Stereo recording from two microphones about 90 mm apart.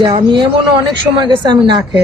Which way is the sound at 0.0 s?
60° right (ahead or behind).